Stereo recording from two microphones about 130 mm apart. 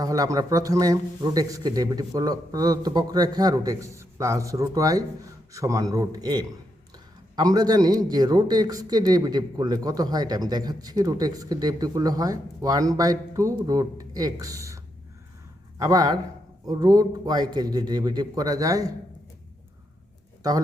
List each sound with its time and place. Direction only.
0.0 s speech: 25° right (ahead or behind)
15.8 s a man's voice: 30° right (ahead or behind)